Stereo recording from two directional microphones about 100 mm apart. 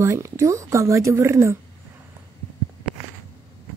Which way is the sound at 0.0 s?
30° right (ahead or behind).